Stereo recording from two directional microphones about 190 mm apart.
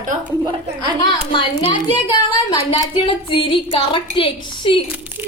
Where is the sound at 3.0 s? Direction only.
25° left (ahead or behind).